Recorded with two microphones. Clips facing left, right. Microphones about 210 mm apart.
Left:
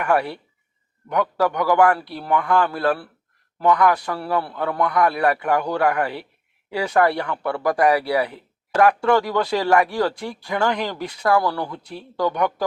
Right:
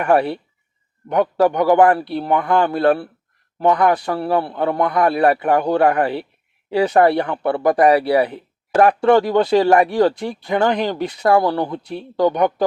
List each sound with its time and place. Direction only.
0.0 s speech: 30° right (ahead or behind)